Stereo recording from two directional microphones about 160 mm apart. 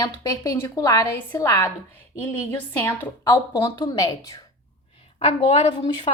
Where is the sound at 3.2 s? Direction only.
25° left (ahead or behind).